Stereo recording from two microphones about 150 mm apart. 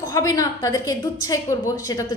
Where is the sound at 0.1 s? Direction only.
20° left (ahead or behind).